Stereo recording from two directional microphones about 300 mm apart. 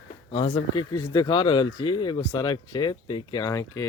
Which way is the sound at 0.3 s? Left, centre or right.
Centre.